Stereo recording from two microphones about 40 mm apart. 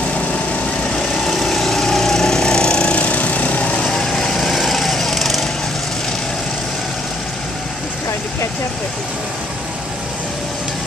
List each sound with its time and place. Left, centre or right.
0.9 s vehicle: centre
1.3 s lawn mower: centre; by 3.8 s left
3.8 s light engine: centre
4.4 s lawn mower: centre